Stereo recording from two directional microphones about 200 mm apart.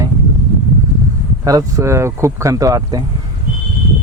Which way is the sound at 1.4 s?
15° right (ahead or behind).